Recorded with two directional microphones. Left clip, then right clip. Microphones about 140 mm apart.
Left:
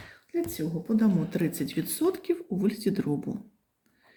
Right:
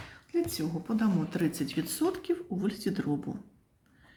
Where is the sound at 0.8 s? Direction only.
Centre (ahead or behind); by 3.3 s 15° left (ahead or behind).